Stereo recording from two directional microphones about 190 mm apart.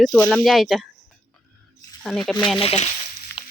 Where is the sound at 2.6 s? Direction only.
30° left (ahead or behind).